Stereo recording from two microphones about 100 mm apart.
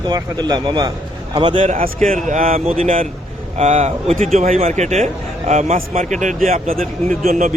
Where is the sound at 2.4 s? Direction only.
90° right.